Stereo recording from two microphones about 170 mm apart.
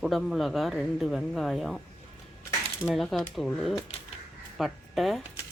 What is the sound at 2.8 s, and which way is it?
Speech, centre (ahead or behind).